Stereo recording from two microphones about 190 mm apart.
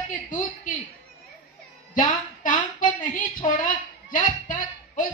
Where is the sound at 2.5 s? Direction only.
45° left (ahead or behind).